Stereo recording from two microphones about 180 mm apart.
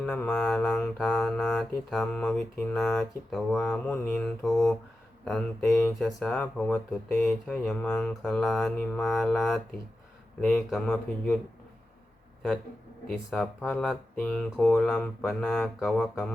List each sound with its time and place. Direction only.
0.0 s mantra: 5° left (ahead or behind)
13.1 s mantra: 5° left (ahead or behind)